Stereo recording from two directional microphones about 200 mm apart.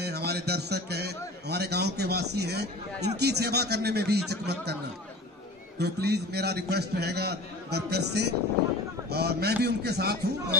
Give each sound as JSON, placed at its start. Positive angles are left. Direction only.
{"t": 0.0, "sound": "a man's voice", "side_deg": -55}
{"t": 5.8, "sound": "a man's voice", "side_deg": -55}